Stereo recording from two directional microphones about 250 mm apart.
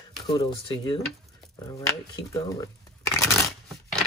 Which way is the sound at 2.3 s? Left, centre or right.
Centre.